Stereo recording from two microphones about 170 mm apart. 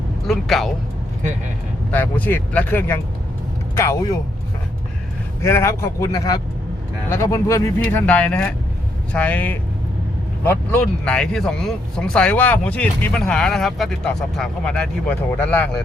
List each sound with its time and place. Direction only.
0.3 s speech: centre (ahead or behind)
1.9 s speech: 10° left (ahead or behind)
5.4 s speech: 15° left (ahead or behind)